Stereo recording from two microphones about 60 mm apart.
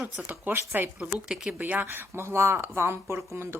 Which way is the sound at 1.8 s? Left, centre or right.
Right.